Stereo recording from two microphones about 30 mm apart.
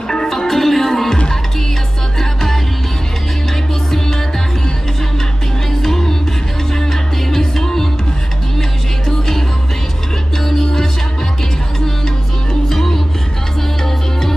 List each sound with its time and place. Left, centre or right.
0.3 s music: centre
2.1 s music: centre
5.7 s music: centre
9.0 s music: centre
10.4 s music: centre
12.6 s music: centre